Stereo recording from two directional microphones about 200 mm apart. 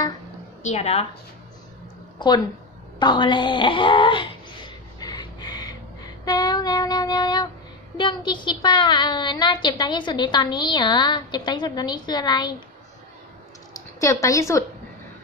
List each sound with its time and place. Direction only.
0.6 s speech: 35° left (ahead or behind)
2.1 s a woman's voice: 20° left (ahead or behind)
3.0 s wail: 20° left (ahead or behind)
8.0 s a woman's voice: 25° left (ahead or behind)
13.9 s a woman's voice: 15° left (ahead or behind)